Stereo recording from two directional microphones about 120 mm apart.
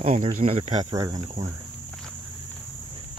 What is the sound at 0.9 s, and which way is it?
Speech, 30° right (ahead or behind).